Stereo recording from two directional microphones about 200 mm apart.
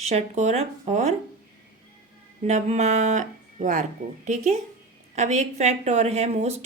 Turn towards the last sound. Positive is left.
turn(degrees=-35)  # may be behind; listen again after turning